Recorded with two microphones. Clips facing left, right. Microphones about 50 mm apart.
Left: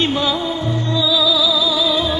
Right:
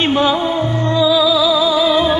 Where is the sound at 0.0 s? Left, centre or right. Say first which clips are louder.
Right 4 dB; right.